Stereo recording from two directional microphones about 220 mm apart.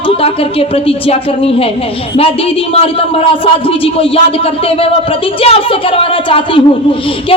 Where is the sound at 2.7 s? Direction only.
25° left (ahead or behind).